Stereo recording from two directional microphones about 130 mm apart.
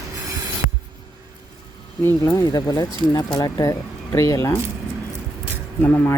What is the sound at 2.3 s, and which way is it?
Speech, 30° left (ahead or behind).